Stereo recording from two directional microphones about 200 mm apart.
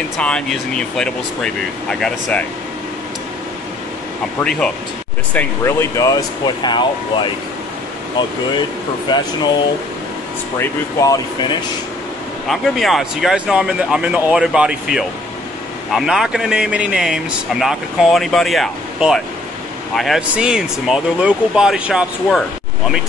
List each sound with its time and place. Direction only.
0.2 s a man's voice: 5° left (ahead or behind)
4.4 s a man's voice: 5° left (ahead or behind); by 6.8 s 20° left (ahead or behind)
9.1 s speech: 20° left (ahead or behind)
10.6 s speech: 15° left (ahead or behind)
12.4 s a man's voice: centre (ahead or behind)